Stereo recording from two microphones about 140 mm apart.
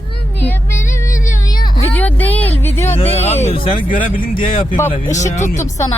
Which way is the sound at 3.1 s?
50° left (ahead or behind).